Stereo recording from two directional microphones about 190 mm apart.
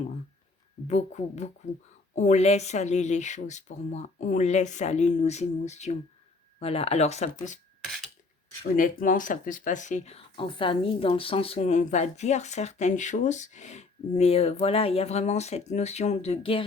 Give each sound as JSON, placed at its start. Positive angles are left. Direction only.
{"t": 0.9, "sound": "speech", "side_deg": 35}
{"t": 8.7, "sound": "speech", "side_deg": 45}